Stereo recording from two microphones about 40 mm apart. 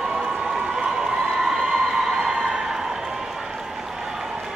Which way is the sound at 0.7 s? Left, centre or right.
Centre.